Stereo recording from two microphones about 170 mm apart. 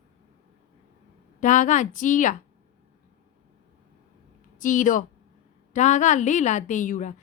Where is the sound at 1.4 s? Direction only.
50° left (ahead or behind).